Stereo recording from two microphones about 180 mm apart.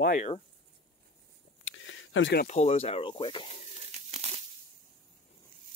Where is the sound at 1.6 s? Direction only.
90° left.